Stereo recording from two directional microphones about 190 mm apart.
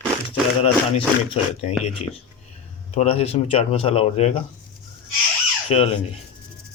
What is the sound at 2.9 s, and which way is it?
Speech, 35° left (ahead or behind).